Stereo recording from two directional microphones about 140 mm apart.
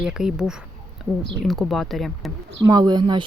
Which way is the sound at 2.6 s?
30° right (ahead or behind).